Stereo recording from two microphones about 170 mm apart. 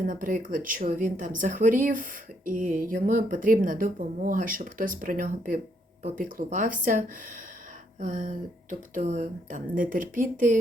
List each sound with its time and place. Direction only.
0.0 s speech: 55° right (ahead or behind)